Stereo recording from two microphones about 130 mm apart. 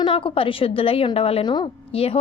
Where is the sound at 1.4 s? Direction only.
35° left (ahead or behind).